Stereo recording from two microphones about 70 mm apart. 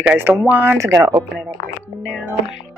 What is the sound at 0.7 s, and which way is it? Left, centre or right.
Speech, right.